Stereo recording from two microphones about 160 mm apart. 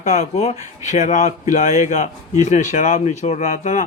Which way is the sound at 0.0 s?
45° left (ahead or behind).